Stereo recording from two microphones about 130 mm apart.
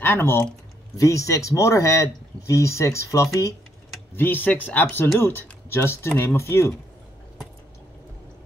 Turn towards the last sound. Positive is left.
turn(degrees=20)  # may be behind; listen again after turning